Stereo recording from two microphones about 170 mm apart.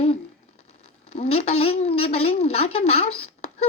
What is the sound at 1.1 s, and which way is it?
A woman's voice, 35° left (ahead or behind).